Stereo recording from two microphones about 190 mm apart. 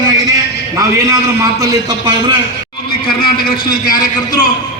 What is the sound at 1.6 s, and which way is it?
Speech, 20° right (ahead or behind).